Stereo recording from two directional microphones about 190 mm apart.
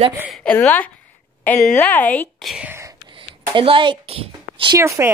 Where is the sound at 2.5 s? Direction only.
10° right (ahead or behind).